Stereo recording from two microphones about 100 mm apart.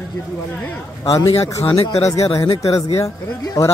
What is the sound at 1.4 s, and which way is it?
Speech, 35° left (ahead or behind).